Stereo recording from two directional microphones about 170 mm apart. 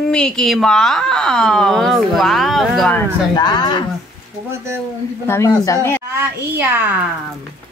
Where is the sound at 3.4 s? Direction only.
25° left (ahead or behind).